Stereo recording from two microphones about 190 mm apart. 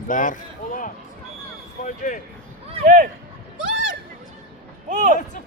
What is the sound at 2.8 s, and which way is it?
Speech, 45° right (ahead or behind).